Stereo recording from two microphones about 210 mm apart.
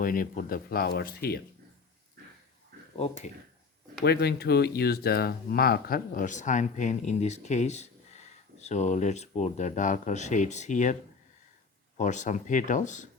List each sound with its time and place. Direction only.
0.0 s speech: 40° left (ahead or behind)
2.9 s speech: 30° left (ahead or behind)
4.0 s speech: 50° left (ahead or behind)
11.9 s speech: 35° left (ahead or behind)